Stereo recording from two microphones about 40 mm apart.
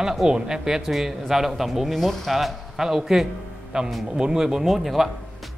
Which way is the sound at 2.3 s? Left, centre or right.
Centre.